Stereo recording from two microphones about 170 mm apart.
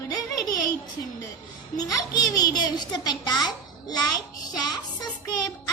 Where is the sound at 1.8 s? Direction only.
20° left (ahead or behind).